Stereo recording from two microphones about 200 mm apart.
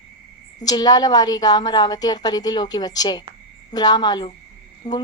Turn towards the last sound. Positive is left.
turn(degrees=20)  # may be behind; listen again after turning